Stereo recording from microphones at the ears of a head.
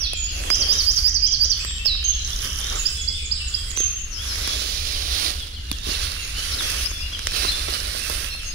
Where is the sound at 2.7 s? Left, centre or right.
Right.